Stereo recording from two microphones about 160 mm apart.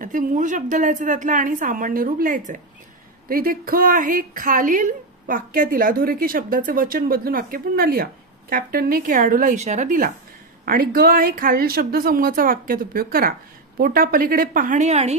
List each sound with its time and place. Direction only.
0.0 s a woman's voice: 55° right (ahead or behind)
10.6 s a woman's voice: 65° right (ahead or behind); by 15.1 s 40° right (ahead or behind)